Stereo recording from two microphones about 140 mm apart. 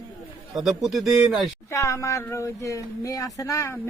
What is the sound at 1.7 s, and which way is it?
Speech, 20° left (ahead or behind).